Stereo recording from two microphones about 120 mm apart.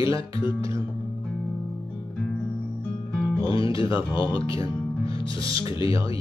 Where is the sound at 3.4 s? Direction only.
50° left (ahead or behind).